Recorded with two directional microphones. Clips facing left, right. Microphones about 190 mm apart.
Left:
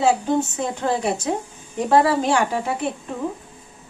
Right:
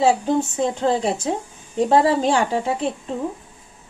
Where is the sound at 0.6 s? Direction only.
30° right (ahead or behind).